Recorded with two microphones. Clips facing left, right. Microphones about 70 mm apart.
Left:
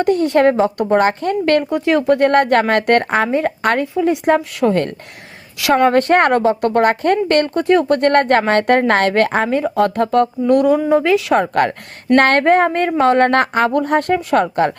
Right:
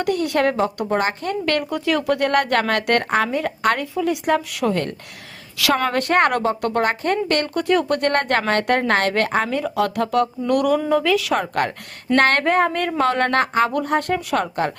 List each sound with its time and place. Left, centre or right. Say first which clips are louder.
0.0 s speech: left 6 dB; left
1.7 s speech: left 6 dB; left
3.9 s speech: left 5 dB; left
4.6 s speech: left 6 dB; left
7.5 s speech: left 5 dB; left
10.5 s speech: left 5 dB; left
11.3 s speech: left 6 dB; left